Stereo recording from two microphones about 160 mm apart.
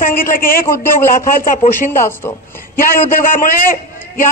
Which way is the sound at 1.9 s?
15° left (ahead or behind).